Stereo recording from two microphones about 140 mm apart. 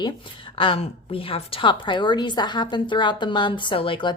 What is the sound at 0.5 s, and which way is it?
A woman's voice, 40° left (ahead or behind).